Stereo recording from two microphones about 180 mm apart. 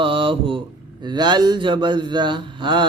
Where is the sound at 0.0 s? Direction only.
30° right (ahead or behind).